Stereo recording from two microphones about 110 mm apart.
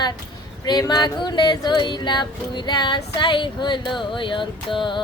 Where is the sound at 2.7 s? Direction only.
45° left (ahead or behind).